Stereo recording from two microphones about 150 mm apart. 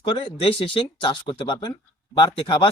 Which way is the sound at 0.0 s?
35° left (ahead or behind).